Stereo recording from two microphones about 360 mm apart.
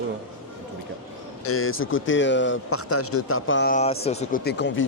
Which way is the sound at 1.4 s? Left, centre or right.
Left.